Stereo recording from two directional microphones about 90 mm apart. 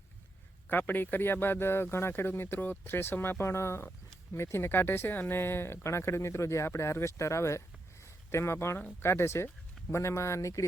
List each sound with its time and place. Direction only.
0.7 s speech: 20° left (ahead or behind)